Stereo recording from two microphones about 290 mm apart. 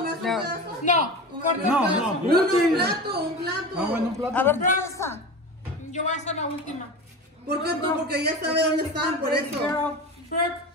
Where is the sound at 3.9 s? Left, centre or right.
Centre.